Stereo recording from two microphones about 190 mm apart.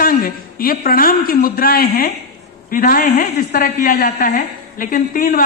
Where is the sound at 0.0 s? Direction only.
50° left (ahead or behind).